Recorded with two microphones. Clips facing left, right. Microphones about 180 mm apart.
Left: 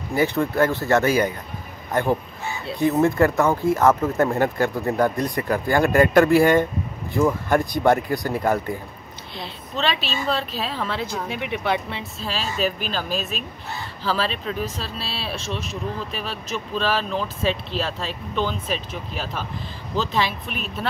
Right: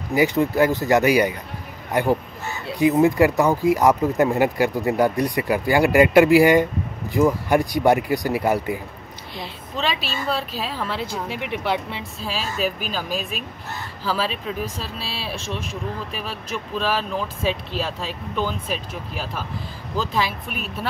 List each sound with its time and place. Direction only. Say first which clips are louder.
0.1 s speech: right 2 dB; 15° right (ahead or behind)